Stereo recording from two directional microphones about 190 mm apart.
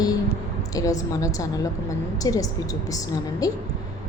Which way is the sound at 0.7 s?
20° left (ahead or behind).